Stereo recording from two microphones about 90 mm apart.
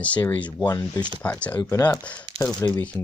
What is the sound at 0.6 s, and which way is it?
Speech, 35° left (ahead or behind).